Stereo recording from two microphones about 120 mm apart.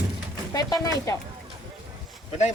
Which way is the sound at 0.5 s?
30° left (ahead or behind).